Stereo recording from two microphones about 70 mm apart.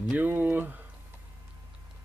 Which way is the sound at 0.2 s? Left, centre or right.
Right.